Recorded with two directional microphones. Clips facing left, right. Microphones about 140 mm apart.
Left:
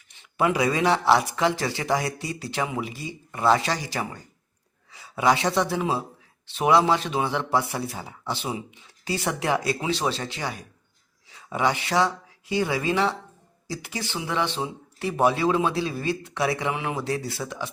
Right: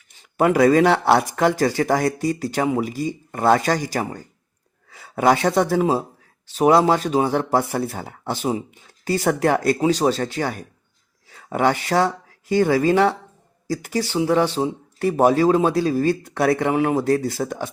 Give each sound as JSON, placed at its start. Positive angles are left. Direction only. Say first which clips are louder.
{"t": 0.2, "sound": "speech", "louder": "right 7 dB", "side_deg": -45}